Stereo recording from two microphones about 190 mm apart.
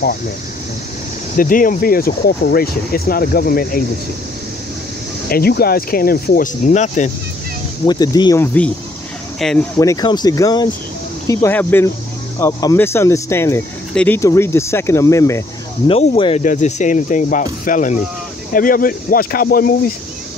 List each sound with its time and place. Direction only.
1.3 s speech: 45° left (ahead or behind)
5.3 s speech: 55° left (ahead or behind); by 7.1 s 40° left (ahead or behind)
7.8 s speech: 20° left (ahead or behind)
9.4 s speech: centre (ahead or behind)
9.8 s speech: 20° left (ahead or behind)
15.9 s speech: 30° left (ahead or behind); by 19.9 s 50° left (ahead or behind)